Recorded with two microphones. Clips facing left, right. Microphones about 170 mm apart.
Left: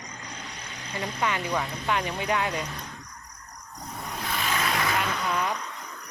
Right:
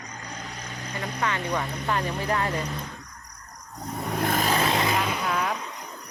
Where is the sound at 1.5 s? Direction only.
Centre (ahead or behind).